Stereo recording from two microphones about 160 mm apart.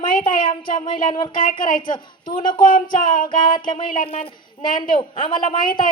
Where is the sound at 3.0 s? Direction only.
60° left (ahead or behind).